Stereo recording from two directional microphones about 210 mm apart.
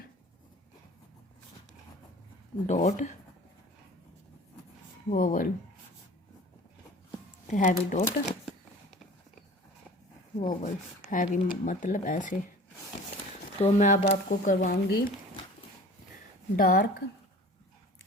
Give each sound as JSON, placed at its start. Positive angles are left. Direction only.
{"t": 2.6, "sound": "speech", "side_deg": 35}
{"t": 5.1, "sound": "speech", "side_deg": 40}
{"t": 7.5, "sound": "speech", "side_deg": 35}
{"t": 10.3, "sound": "speech", "side_deg": 35}
{"t": 13.6, "sound": "speech", "side_deg": 30}
{"t": 16.6, "sound": "speech", "side_deg": 40}